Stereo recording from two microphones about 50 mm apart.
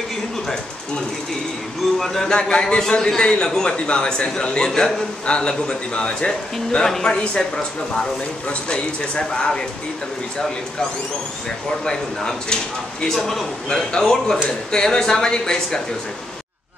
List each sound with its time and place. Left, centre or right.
2.0 s a man's voice: centre
11.8 s a man's voice: centre